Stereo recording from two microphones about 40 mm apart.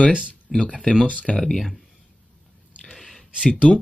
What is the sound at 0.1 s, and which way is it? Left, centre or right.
Speech, right.